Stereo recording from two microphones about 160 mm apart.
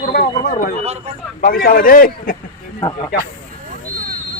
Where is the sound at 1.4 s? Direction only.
65° left (ahead or behind).